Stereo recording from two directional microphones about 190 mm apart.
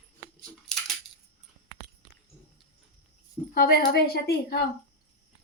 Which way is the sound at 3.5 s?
55° left (ahead or behind).